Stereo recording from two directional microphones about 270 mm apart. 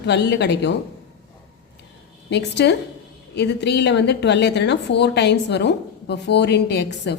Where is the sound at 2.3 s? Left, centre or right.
Left.